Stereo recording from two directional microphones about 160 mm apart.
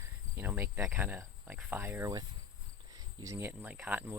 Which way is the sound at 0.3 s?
15° right (ahead or behind).